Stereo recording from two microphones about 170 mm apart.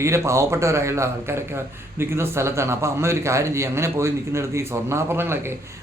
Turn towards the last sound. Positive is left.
turn(degrees=-15)  # may be behind; listen again after turning